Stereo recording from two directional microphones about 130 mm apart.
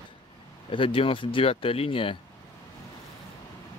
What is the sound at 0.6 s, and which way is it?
Speech, 40° left (ahead or behind).